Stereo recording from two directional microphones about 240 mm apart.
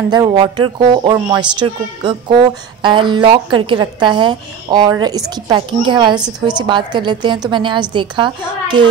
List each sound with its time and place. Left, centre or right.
0.1 s speech: centre